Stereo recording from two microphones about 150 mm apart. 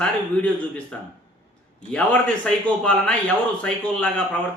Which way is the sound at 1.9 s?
10° left (ahead or behind).